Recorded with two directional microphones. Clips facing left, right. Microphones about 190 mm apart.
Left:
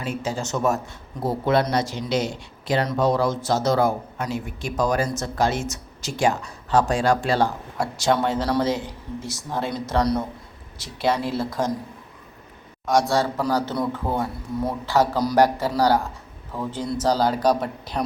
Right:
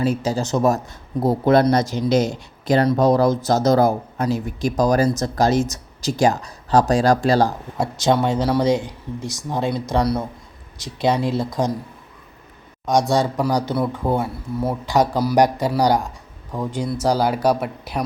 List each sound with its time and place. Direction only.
0.0 s speech: 35° right (ahead or behind)
7.8 s speech: 20° right (ahead or behind)
12.8 s speech: 20° right (ahead or behind)